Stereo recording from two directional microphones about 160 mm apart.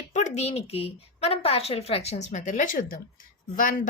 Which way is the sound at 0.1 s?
45° left (ahead or behind).